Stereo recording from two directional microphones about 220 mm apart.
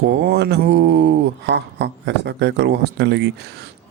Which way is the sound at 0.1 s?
50° right (ahead or behind).